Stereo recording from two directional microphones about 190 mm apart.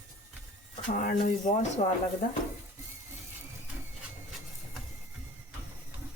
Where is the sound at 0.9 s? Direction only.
45° left (ahead or behind).